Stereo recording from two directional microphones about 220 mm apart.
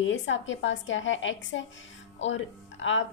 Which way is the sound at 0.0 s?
55° left (ahead or behind).